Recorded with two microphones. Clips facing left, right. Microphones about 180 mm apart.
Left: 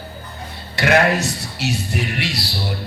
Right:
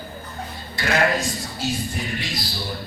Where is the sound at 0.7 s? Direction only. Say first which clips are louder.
Left 5 dB; 75° left (ahead or behind).